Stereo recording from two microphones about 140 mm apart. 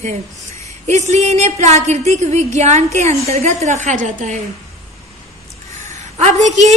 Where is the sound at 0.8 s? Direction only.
55° right (ahead or behind).